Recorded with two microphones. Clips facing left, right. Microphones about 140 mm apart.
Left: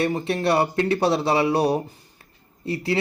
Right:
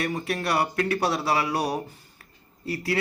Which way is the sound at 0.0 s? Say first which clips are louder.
Left 5 dB; 25° left (ahead or behind).